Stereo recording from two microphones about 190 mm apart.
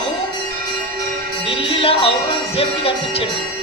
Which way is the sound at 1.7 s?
30° left (ahead or behind).